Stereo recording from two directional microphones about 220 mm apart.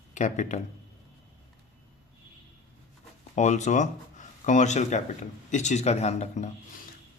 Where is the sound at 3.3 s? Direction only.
30° left (ahead or behind).